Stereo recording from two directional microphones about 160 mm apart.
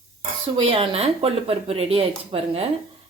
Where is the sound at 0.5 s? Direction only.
35° right (ahead or behind).